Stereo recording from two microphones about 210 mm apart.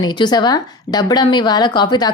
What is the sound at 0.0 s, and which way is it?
A woman's voice, 20° left (ahead or behind).